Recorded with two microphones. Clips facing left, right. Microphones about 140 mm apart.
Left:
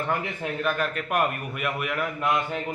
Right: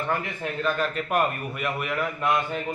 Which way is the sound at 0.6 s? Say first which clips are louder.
Right 2 dB; 5° left (ahead or behind).